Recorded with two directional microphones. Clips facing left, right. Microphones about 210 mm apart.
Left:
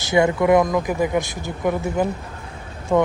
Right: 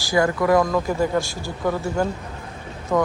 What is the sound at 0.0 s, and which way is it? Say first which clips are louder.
Speech: left 2 dB; 20° left (ahead or behind).